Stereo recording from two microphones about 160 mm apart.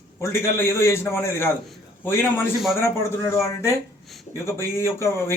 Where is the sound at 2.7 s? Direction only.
15° left (ahead or behind).